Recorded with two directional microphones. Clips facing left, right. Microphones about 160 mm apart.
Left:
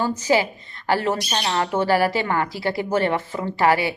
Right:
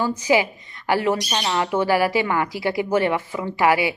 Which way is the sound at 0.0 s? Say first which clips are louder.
Right 1 dB; 10° right (ahead or behind).